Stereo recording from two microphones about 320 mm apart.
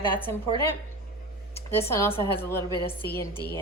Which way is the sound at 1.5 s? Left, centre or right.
Centre.